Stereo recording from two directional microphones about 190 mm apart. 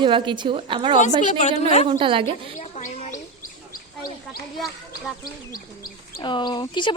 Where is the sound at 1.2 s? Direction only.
40° left (ahead or behind).